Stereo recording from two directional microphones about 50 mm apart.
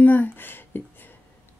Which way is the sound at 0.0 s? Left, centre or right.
Left.